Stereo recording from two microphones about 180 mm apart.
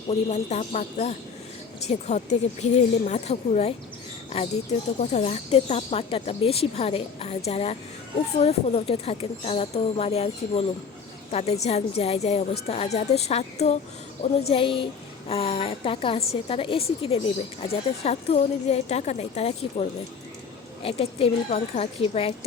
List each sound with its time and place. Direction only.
0.1 s speech: 40° left (ahead or behind)
4.9 s a woman's voice: 40° left (ahead or behind)